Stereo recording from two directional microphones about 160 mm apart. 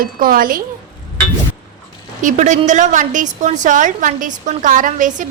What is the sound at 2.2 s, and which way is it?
A woman's voice, 50° right (ahead or behind).